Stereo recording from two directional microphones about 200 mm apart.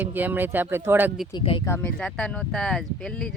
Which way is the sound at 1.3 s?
25° left (ahead or behind).